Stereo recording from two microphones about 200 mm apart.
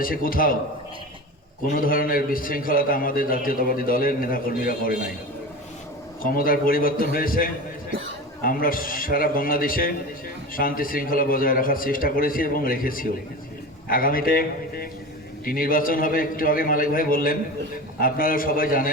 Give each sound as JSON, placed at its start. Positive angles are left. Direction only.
{"t": 0.0, "sound": "a man's voice", "side_deg": 45}
{"t": 1.6, "sound": "a man's voice", "side_deg": 45}
{"t": 6.3, "sound": "a man's voice", "side_deg": 45}